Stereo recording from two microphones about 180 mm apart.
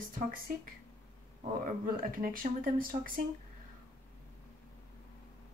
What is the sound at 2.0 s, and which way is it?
Speech, 50° right (ahead or behind).